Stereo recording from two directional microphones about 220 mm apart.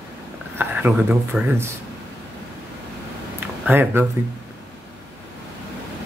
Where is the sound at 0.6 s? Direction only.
10° right (ahead or behind).